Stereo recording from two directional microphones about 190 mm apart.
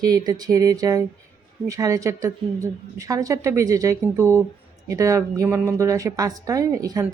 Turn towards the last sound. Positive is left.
turn(degrees=-20)  # may be behind; listen again after turning